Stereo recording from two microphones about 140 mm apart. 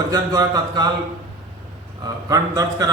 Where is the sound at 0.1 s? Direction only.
25° right (ahead or behind).